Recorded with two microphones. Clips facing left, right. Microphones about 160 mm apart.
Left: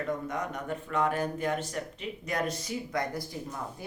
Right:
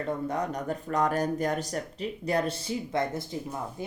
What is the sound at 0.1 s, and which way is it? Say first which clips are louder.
Speech: right 3 dB; 35° right (ahead or behind).